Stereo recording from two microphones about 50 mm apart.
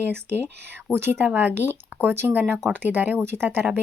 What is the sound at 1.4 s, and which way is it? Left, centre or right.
Speech, right.